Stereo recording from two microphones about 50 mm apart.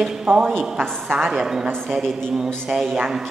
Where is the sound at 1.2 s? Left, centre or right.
Centre.